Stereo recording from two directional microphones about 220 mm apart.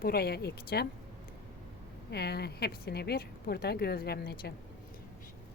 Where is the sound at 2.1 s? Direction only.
45° left (ahead or behind).